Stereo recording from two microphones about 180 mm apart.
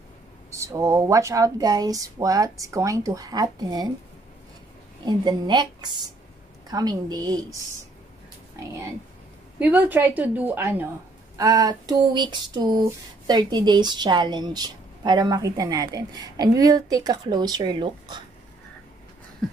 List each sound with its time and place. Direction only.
0.5 s speech: 15° right (ahead or behind)
5.0 s speech: 25° right (ahead or behind)
9.6 s a woman's voice: 10° right (ahead or behind); by 18.2 s 25° right (ahead or behind)
19.4 s a sound: 5° left (ahead or behind)